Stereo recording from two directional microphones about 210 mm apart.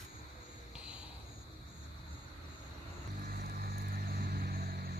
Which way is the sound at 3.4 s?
45° right (ahead or behind).